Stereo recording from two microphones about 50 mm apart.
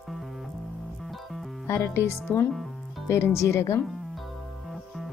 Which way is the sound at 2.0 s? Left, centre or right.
Left.